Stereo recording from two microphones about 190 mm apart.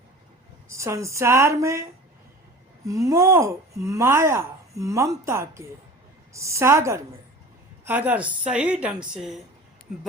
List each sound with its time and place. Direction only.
0.7 s a woman's voice: 15° right (ahead or behind)